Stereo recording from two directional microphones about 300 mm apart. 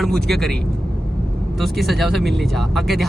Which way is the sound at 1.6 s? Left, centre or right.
Centre.